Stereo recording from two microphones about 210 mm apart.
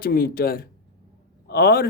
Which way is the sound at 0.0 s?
45° left (ahead or behind).